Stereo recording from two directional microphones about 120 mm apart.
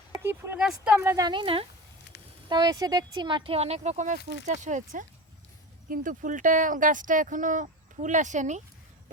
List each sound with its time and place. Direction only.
0.2 s a sound: 20° right (ahead or behind)
0.5 s speech: 5° right (ahead or behind)
0.9 s a woman's voice: 25° right (ahead or behind)
1.3 s speech: 45° right (ahead or behind)
2.5 s speech: 35° right (ahead or behind); by 5.0 s 90° right
6.1 s speech: 90° right